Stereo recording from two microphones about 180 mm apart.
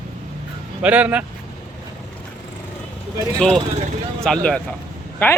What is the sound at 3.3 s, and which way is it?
Speech, 5° left (ahead or behind).